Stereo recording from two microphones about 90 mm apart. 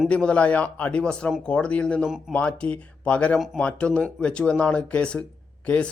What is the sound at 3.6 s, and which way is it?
Speech, 15° left (ahead or behind).